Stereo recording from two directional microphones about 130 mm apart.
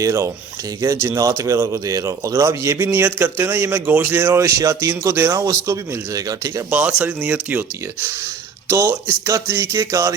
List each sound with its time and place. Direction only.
0.0 s a man's voice: 25° right (ahead or behind)
6.7 s speech: 10° right (ahead or behind)
8.7 s a man's voice: 25° right (ahead or behind)